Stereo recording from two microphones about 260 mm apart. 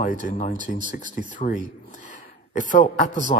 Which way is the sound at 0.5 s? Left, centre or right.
Right.